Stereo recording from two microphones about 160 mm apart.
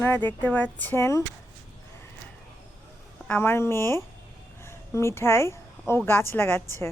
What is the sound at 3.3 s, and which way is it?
Speech, 15° left (ahead or behind).